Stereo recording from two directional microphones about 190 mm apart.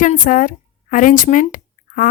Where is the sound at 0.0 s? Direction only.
45° left (ahead or behind).